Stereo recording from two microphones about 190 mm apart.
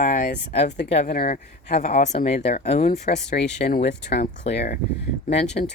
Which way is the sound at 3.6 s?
50° left (ahead or behind).